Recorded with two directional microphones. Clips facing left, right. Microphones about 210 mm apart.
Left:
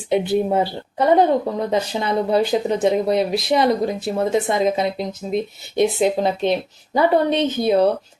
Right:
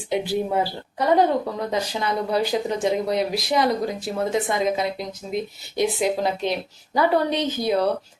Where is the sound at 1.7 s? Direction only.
25° left (ahead or behind).